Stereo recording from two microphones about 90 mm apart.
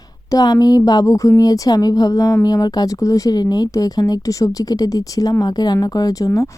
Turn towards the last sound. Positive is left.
turn(degrees=40)  # may be behind; listen again after turning